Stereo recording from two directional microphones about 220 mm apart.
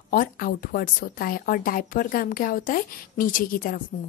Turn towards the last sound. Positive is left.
turn(degrees=40)  # may be behind; listen again after turning